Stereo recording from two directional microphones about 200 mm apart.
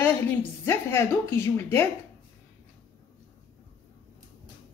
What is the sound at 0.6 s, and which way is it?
A woman's voice, 15° left (ahead or behind).